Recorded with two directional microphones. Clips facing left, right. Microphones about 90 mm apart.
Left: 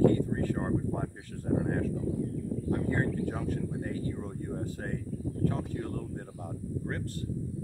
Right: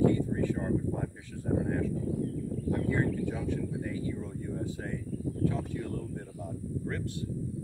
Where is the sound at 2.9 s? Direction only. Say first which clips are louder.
Even; 45° left (ahead or behind).